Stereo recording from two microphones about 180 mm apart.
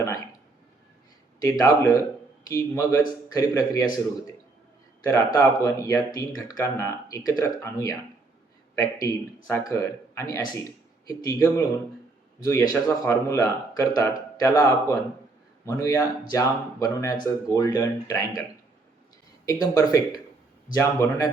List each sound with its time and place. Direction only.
1.4 s speech: 15° left (ahead or behind)
5.0 s a man's voice: 20° left (ahead or behind)
19.5 s speech: 20° left (ahead or behind)